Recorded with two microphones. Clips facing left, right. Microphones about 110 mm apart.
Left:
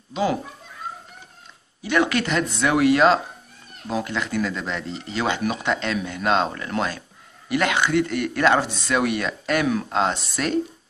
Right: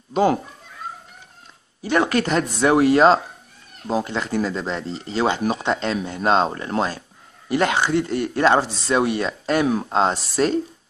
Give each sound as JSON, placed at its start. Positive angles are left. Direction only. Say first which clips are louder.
{"t": 0.1, "sound": "speech", "louder": "right 5 dB", "side_deg": -45}
{"t": 1.8, "sound": "speech", "louder": "right 2 dB", "side_deg": -40}